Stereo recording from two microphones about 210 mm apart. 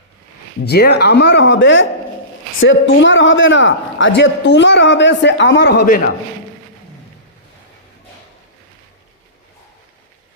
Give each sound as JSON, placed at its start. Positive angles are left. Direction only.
{"t": 0.6, "sound": "a man's voice", "side_deg": 50}